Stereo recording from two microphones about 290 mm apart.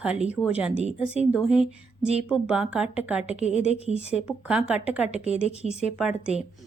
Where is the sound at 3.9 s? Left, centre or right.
Left.